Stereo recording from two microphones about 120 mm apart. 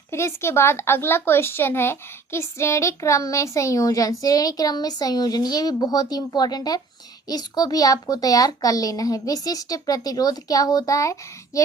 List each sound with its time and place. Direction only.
0.1 s a woman's voice: 20° left (ahead or behind)